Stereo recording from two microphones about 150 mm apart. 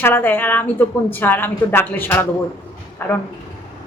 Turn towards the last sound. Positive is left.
turn(degrees=15)  # may be behind; listen again after turning